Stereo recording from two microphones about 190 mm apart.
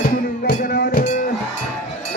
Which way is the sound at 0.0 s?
45° left (ahead or behind).